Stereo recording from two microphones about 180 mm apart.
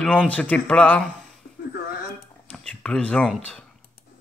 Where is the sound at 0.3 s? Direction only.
5° left (ahead or behind).